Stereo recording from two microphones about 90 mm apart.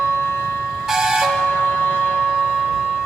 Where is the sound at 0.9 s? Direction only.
5° right (ahead or behind).